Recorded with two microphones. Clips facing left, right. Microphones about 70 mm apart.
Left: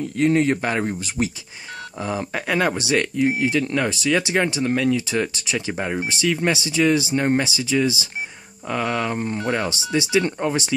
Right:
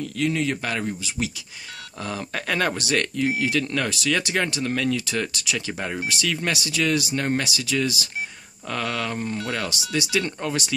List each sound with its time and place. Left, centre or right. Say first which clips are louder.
0.0 s speech: left 6 dB; left
0.9 s speech: left 4 dB; left
2.0 s speech: left 4 dB; centre